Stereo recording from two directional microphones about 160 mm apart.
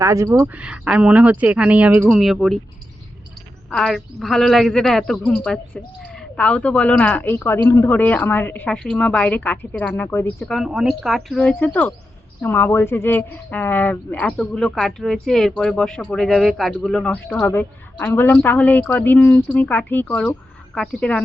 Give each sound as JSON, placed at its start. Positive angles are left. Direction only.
{"t": 0.0, "sound": "speech", "side_deg": -20}
{"t": 0.4, "sound": "speech", "side_deg": -10}
{"t": 3.7, "sound": "speech", "side_deg": 0}